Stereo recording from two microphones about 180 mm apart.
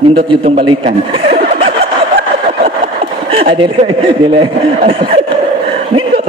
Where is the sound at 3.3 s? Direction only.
30° right (ahead or behind).